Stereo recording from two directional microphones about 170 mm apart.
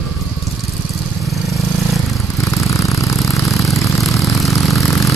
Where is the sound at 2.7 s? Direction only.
20° left (ahead or behind).